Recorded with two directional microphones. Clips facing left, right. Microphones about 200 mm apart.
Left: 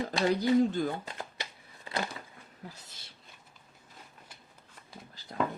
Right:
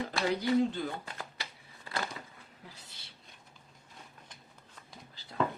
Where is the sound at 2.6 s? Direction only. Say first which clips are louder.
Left 7 dB; 45° left (ahead or behind).